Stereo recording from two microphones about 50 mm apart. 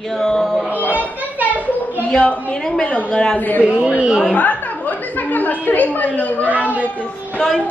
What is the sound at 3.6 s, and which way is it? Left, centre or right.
Speech, right.